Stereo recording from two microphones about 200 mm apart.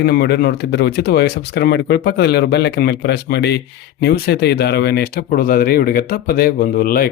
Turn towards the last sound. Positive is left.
turn(degrees=45)  # may be behind; listen again after turning